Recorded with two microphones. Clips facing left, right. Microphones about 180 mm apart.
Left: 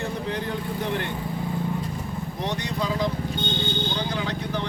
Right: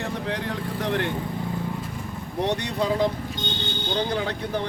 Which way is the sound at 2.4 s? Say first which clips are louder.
Right 5 dB; 65° right (ahead or behind).